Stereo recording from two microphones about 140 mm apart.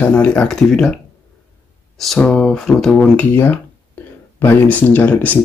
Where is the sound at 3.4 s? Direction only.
15° left (ahead or behind).